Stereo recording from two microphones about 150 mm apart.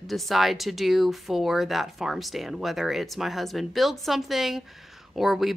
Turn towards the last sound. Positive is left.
turn(degrees=0)  # may be behind; listen again after turning